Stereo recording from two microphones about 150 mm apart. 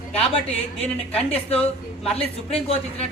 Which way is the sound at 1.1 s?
40° left (ahead or behind).